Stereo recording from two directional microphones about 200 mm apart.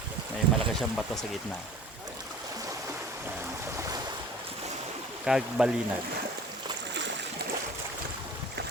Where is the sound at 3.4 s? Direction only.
15° right (ahead or behind).